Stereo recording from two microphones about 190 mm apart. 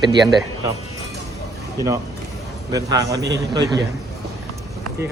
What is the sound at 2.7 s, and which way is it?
A man's voice, 20° right (ahead or behind).